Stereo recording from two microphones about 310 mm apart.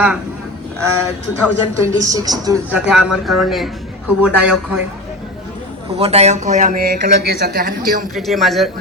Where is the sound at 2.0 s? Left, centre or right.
Centre.